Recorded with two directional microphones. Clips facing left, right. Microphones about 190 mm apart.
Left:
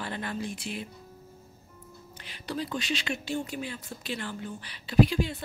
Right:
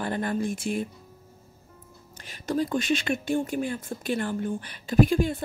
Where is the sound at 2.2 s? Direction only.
45° right (ahead or behind).